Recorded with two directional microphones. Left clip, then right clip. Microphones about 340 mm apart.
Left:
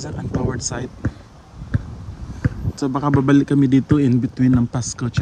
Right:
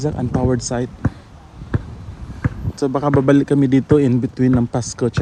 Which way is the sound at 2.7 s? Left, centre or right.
Centre.